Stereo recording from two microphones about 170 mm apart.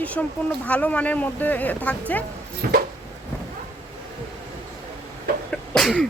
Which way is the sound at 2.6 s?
55° right (ahead or behind).